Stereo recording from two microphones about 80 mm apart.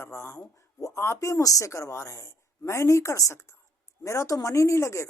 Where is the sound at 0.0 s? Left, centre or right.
Left.